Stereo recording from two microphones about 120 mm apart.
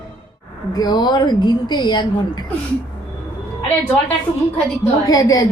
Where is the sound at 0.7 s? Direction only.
35° left (ahead or behind).